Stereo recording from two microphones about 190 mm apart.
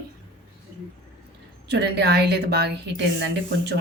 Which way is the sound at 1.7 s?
60° right (ahead or behind).